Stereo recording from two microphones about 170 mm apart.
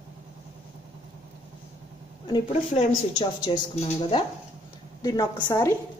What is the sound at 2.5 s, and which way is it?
Speech, 45° left (ahead or behind).